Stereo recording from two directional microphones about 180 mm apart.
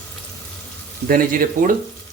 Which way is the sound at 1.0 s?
55° right (ahead or behind).